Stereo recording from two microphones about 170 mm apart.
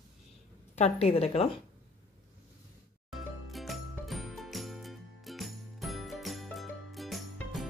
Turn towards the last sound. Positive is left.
turn(degrees=0)  # may be behind; listen again after turning